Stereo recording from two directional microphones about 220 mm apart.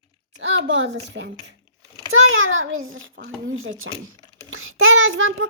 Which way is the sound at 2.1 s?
65° right (ahead or behind).